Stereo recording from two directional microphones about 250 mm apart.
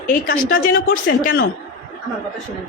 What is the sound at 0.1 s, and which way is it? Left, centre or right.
A woman's voice, left.